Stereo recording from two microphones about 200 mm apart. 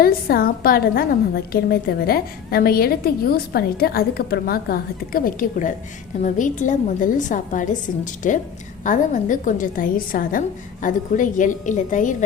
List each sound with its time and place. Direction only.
0.0 s a woman's voice: 50° left (ahead or behind)